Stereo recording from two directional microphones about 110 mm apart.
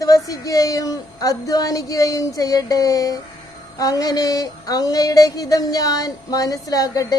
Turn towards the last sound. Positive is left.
turn(degrees=35)  # may be behind; listen again after turning